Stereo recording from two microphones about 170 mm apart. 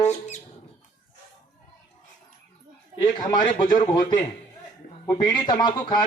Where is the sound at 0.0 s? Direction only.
40° left (ahead or behind).